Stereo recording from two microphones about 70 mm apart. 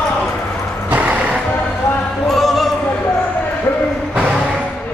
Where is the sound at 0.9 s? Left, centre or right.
Right.